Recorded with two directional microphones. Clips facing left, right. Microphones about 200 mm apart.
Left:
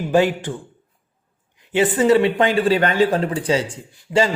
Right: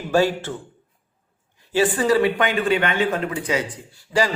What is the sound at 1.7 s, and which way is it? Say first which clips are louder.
Speech: left 3 dB; 20° left (ahead or behind).